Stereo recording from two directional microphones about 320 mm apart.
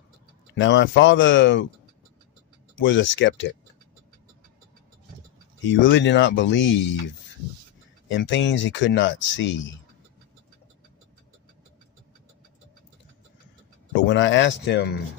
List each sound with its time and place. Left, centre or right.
0.6 s speech: left
2.8 s speech: left
5.8 s speech: left
8.1 s speech: left
14.0 s speech: left